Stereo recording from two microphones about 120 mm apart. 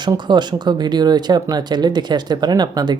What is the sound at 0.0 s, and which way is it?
Speech, 40° right (ahead or behind).